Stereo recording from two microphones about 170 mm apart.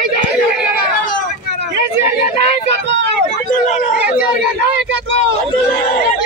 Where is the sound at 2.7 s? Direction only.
90° right.